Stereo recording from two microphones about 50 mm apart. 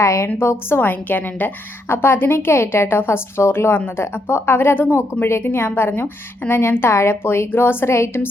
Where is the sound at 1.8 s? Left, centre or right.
Left.